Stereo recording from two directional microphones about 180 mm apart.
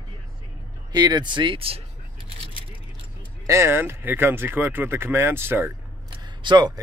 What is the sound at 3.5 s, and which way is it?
Speech, 15° right (ahead or behind).